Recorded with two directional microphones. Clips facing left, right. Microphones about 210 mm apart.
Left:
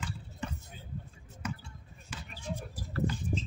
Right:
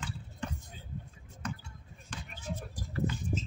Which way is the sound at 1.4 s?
10° left (ahead or behind).